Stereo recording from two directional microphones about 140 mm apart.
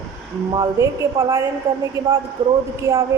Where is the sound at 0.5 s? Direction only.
30° right (ahead or behind).